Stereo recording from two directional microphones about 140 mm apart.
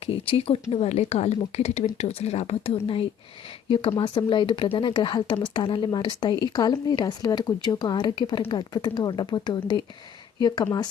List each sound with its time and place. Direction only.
0.0 s a woman's voice: 45° left (ahead or behind)